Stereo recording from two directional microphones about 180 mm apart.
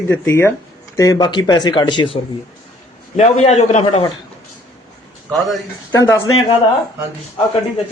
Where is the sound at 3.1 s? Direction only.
40° left (ahead or behind).